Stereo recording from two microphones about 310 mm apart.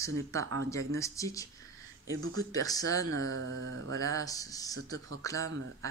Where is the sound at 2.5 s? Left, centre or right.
Centre.